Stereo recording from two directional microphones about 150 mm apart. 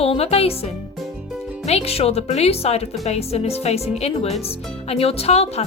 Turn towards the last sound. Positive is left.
turn(degrees=45)  # may be behind; listen again after turning